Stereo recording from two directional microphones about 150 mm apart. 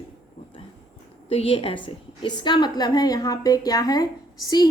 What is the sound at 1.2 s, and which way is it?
A woman's voice, 40° left (ahead or behind).